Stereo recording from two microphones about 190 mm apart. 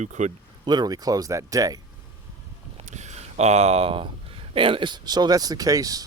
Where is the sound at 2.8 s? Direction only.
40° right (ahead or behind).